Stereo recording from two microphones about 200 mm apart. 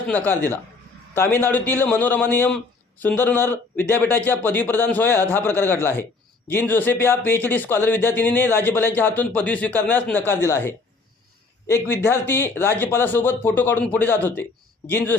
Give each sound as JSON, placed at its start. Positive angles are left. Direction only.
{"t": 0.1, "sound": "speech", "side_deg": 10}